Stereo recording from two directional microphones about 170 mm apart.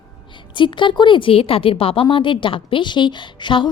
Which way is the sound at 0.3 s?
30° left (ahead or behind).